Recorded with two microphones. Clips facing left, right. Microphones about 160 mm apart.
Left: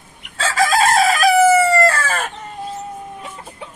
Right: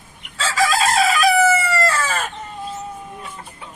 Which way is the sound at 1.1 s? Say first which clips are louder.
Left 4 dB; 45° left (ahead or behind).